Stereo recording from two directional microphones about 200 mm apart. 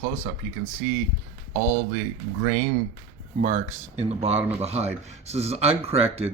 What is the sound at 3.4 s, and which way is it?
Speech, 40° right (ahead or behind).